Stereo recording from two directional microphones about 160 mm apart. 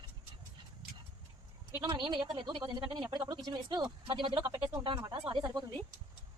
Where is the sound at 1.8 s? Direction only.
25° right (ahead or behind).